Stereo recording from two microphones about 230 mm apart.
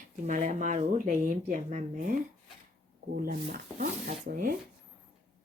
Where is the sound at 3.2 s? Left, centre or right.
Right.